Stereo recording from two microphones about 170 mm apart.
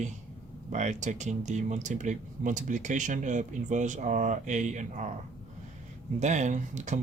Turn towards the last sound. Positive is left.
turn(degrees=-45)  # may be behind; listen again after turning